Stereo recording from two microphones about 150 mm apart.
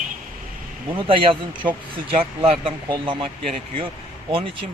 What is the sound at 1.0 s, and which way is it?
Speech, 35° right (ahead or behind).